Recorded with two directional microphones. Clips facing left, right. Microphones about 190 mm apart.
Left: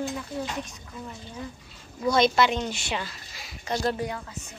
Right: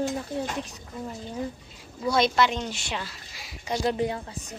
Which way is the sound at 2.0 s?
Centre (ahead or behind).